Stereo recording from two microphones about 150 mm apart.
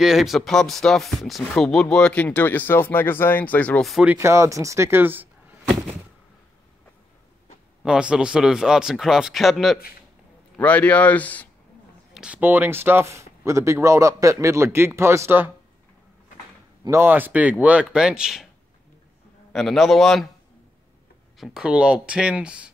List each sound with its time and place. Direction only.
0.0 s speech: centre (ahead or behind)
4.1 s speech: 20° right (ahead or behind)
7.8 s speech: 5° right (ahead or behind); by 11.4 s 10° left (ahead or behind)
12.1 s speech: 5° right (ahead or behind)
16.8 s speech: 15° right (ahead or behind)
19.5 s speech: centre (ahead or behind)
21.4 s speech: 5° right (ahead or behind)